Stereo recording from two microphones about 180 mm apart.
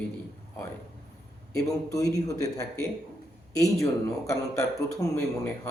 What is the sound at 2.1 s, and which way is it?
Speech, 20° left (ahead or behind).